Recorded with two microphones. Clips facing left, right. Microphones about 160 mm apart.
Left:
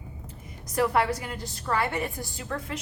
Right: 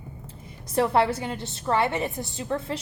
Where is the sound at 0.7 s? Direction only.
30° right (ahead or behind).